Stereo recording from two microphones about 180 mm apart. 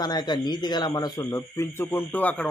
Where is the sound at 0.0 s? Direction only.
25° left (ahead or behind).